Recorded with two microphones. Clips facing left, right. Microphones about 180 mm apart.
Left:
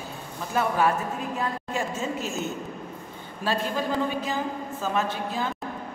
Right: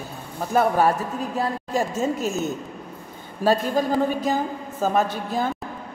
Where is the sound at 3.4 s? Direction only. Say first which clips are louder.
Right 7 dB; 40° right (ahead or behind).